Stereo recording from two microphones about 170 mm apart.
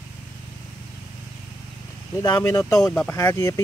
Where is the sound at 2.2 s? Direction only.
25° left (ahead or behind).